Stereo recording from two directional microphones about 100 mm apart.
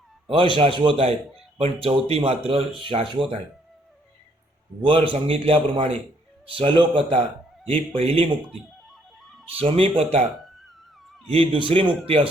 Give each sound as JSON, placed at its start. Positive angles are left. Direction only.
{"t": 0.3, "sound": "speech", "side_deg": -60}
{"t": 1.5, "sound": "speech", "side_deg": -70}
{"t": 2.5, "sound": "speech", "side_deg": -65}
{"t": 4.8, "sound": "a man's voice", "side_deg": -60}
{"t": 7.7, "sound": "a man's voice", "side_deg": -70}
{"t": 8.4, "sound": "music", "side_deg": 0}
{"t": 9.5, "sound": "a man's voice", "side_deg": -70}
{"t": 10.0, "sound": "speech", "side_deg": -90}
{"t": 11.3, "sound": "a man's voice", "side_deg": -65}